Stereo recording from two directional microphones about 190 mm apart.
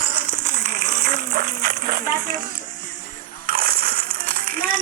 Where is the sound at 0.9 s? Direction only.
50° right (ahead or behind).